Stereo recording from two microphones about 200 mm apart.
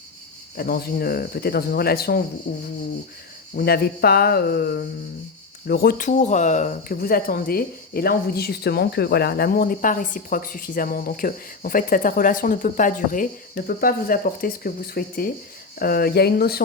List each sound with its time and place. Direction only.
0.5 s speech: 50° left (ahead or behind)
3.5 s speech: 50° left (ahead or behind)